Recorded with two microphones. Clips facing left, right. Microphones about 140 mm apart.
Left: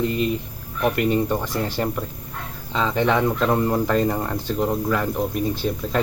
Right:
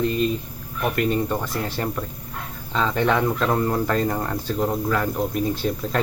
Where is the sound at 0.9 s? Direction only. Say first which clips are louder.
Even; 15° left (ahead or behind).